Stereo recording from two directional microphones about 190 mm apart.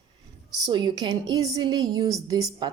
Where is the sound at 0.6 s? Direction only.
25° right (ahead or behind).